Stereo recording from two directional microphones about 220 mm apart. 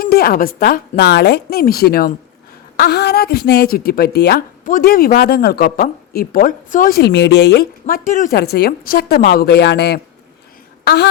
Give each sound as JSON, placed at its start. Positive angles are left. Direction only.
{"t": 0.0, "sound": "a woman's voice", "side_deg": 40}